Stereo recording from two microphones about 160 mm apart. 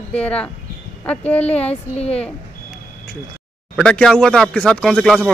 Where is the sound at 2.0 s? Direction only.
40° left (ahead or behind).